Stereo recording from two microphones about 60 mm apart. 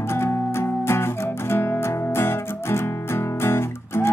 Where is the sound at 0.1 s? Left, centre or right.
Left.